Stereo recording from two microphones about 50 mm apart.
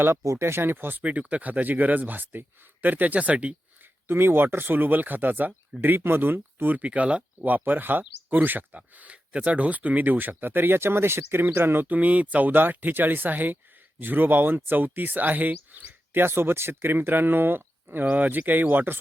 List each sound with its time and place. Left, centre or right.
0.0 s speech: right
1.0 s speech: right
4.0 s speech: right
7.4 s speech: right
11.9 s speech: right
15.9 s speech: right
18.0 s speech: right
18.3 s speech: right